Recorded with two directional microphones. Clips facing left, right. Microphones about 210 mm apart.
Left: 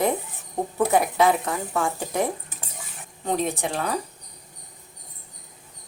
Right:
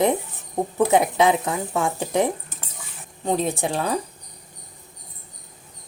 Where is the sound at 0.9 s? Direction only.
20° right (ahead or behind).